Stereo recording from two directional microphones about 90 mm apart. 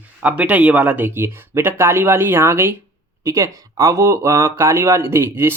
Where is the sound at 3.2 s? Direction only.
35° right (ahead or behind).